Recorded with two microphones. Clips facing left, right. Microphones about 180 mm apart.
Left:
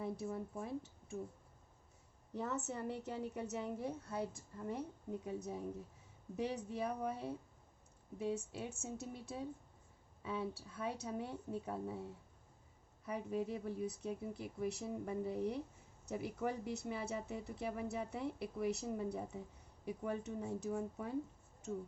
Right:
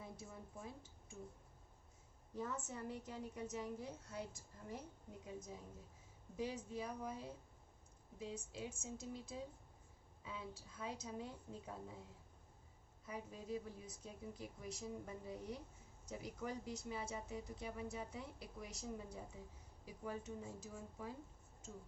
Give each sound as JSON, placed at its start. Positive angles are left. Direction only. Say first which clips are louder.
{"t": 0.0, "sound": "speech", "louder": "left 12 dB", "side_deg": 65}
{"t": 2.3, "sound": "a woman's voice", "louder": "left 5 dB", "side_deg": 70}
{"t": 13.1, "sound": "a woman's voice", "louder": "left 7 dB", "side_deg": 65}